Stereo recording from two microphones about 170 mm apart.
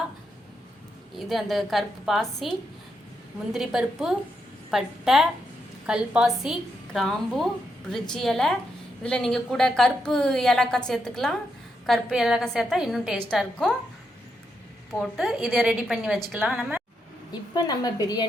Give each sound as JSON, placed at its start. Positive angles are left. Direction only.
{"t": 1.1, "sound": "a woman's voice", "side_deg": 0}
{"t": 14.9, "sound": "a woman's voice", "side_deg": 0}
{"t": 17.5, "sound": "a woman's voice", "side_deg": 25}